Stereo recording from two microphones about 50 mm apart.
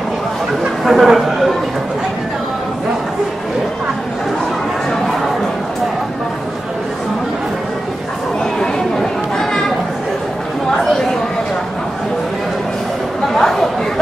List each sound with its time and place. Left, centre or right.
0.8 s speech: centre
13.4 s chatter: centre